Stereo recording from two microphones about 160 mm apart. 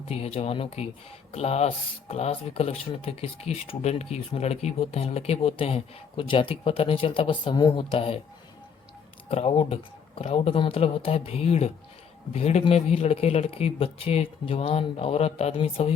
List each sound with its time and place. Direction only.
0.1 s speech: 40° left (ahead or behind)
9.3 s speech: 40° left (ahead or behind)